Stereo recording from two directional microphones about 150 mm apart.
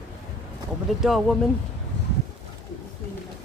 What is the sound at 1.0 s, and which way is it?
Speech, centre (ahead or behind).